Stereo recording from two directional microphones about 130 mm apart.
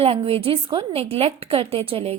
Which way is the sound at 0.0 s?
45° right (ahead or behind).